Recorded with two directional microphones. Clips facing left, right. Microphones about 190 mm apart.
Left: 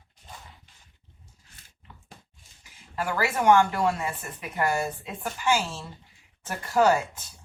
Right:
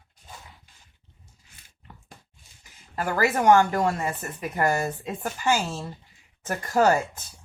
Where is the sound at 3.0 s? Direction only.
45° right (ahead or behind).